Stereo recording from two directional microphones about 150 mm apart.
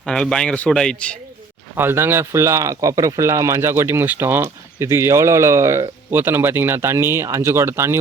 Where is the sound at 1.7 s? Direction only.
15° right (ahead or behind).